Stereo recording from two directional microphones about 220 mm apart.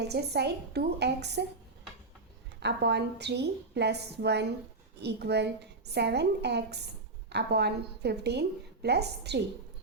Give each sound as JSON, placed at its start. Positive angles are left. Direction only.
{"t": 0.0, "sound": "a woman's voice", "side_deg": -50}
{"t": 2.6, "sound": "a woman's voice", "side_deg": -50}